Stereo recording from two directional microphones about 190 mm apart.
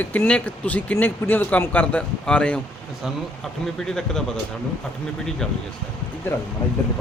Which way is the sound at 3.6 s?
5° left (ahead or behind).